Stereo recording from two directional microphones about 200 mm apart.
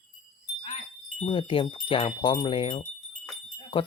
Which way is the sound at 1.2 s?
25° left (ahead or behind).